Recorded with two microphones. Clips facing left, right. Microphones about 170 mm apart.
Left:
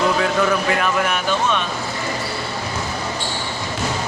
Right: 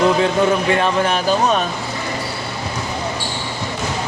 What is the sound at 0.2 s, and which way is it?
Speech, 25° right (ahead or behind).